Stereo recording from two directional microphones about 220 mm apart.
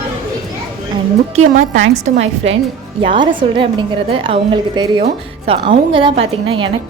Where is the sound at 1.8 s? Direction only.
30° right (ahead or behind).